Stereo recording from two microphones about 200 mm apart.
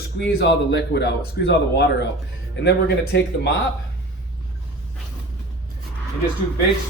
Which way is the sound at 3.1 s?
55° left (ahead or behind).